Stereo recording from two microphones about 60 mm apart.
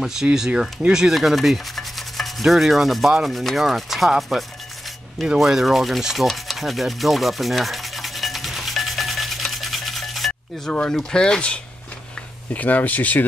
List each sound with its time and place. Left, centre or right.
0.0 s speech: centre
0.6 s rub: centre
10.7 s speech: centre
12.5 s speech: left